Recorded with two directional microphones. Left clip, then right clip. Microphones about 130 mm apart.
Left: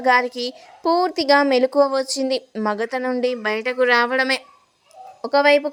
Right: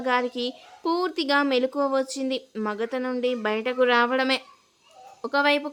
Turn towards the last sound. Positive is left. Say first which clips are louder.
# left 7 dB
turn(degrees=25)  # may be behind; listen again after turning